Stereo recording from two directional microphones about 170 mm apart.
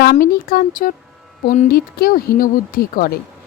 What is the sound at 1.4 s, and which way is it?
Speech, 45° left (ahead or behind).